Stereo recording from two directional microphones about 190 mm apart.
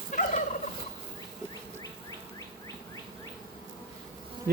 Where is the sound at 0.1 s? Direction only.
40° left (ahead or behind).